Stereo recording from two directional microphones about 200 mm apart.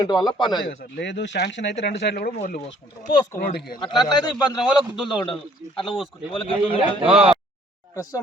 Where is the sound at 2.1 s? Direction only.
40° left (ahead or behind).